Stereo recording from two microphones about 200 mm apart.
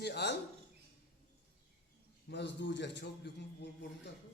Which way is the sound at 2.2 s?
60° left (ahead or behind).